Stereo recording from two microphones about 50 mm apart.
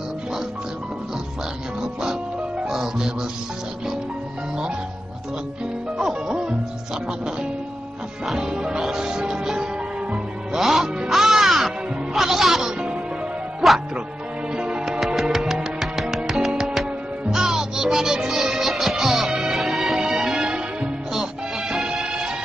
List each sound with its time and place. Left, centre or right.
2.7 s music: centre
5.9 s music: centre
8.3 s music: centre
10.5 s music: centre
13.6 s speech: centre
14.5 s music: centre